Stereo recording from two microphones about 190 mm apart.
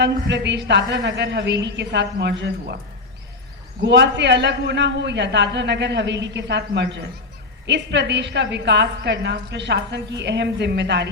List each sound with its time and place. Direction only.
0.0 s a man's voice: 65° right (ahead or behind)
3.8 s a man's voice: 65° right (ahead or behind)